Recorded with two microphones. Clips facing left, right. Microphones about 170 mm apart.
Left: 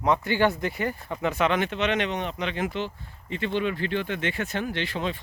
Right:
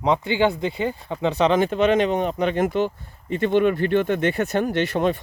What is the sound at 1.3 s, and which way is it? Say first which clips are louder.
Speech: right 7 dB; 35° right (ahead or behind).